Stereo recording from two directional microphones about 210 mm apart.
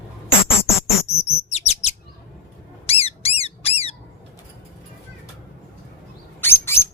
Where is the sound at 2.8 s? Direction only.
30° left (ahead or behind).